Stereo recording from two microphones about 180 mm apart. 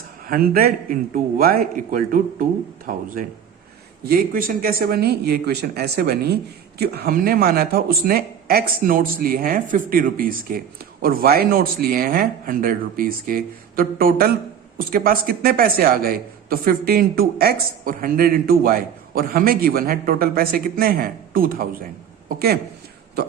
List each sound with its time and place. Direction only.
0.3 s speech: 55° right (ahead or behind)